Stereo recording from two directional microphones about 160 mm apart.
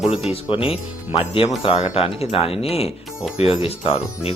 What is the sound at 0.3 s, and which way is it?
Speech, 35° left (ahead or behind).